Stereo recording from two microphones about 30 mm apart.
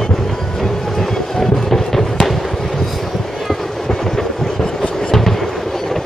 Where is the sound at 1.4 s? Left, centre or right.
Centre.